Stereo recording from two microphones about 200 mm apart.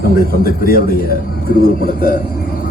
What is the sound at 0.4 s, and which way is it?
A man's voice, 45° left (ahead or behind).